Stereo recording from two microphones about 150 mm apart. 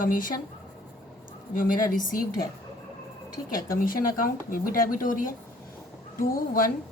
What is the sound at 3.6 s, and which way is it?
Speech, 70° left (ahead or behind).